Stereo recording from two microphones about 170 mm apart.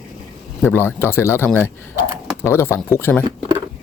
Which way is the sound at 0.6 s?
15° left (ahead or behind).